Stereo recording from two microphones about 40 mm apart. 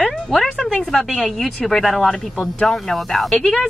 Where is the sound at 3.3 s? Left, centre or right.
Centre.